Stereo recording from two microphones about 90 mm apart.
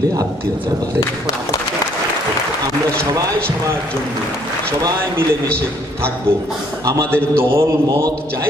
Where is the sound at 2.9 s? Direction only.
15° left (ahead or behind).